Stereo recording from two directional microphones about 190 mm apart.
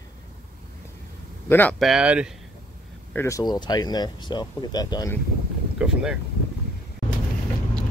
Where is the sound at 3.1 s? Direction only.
15° left (ahead or behind).